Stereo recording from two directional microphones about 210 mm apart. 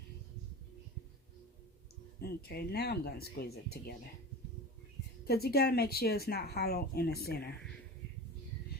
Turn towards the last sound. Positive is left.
turn(degrees=50)  # may be behind; listen again after turning